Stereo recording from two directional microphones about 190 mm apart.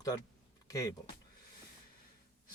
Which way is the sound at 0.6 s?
20° left (ahead or behind).